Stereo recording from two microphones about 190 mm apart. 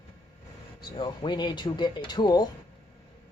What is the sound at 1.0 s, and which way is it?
Speech, 25° left (ahead or behind).